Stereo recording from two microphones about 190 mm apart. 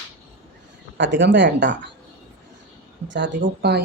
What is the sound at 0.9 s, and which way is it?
Speech, 70° right (ahead or behind).